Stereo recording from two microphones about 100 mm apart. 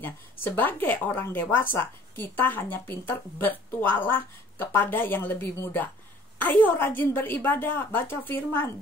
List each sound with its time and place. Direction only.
0.0 s speech: 20° left (ahead or behind)